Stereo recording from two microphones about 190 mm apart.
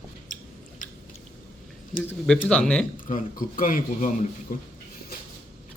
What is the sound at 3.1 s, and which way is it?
A man's voice, 45° left (ahead or behind).